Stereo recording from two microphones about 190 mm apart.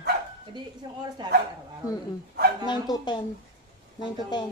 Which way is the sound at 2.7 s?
25° left (ahead or behind).